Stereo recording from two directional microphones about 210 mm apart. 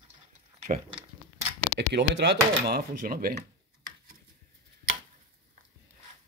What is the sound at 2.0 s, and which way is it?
Speech, 55° right (ahead or behind).